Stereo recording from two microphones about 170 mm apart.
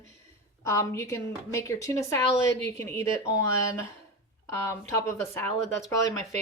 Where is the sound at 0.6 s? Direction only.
15° left (ahead or behind).